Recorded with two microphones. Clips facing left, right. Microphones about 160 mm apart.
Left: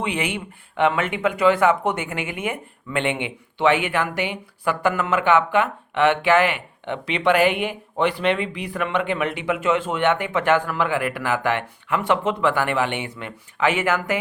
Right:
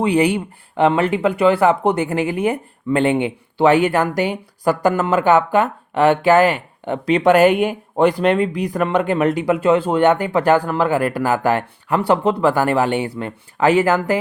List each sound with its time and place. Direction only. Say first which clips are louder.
0.0 s speech: right 10 dB; 35° right (ahead or behind)